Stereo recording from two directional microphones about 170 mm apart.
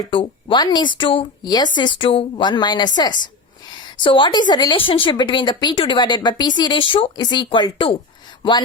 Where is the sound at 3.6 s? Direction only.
25° left (ahead or behind).